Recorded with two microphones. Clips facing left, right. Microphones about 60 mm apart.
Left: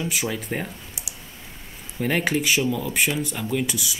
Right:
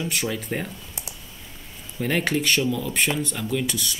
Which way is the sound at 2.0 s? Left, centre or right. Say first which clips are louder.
Left 1 dB; centre.